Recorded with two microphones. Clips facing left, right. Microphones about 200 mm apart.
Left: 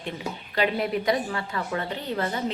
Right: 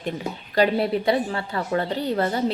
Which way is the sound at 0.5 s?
35° right (ahead or behind).